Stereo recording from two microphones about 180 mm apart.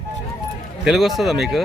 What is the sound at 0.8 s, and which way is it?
Speech, centre (ahead or behind).